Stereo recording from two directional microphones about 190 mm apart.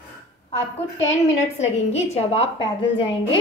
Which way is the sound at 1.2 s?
35° left (ahead or behind).